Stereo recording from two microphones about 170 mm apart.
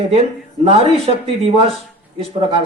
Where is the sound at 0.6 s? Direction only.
35° right (ahead or behind).